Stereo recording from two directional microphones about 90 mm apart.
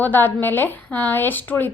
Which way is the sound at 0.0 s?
20° left (ahead or behind).